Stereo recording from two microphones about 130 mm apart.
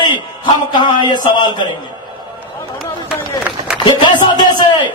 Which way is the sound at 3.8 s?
35° left (ahead or behind).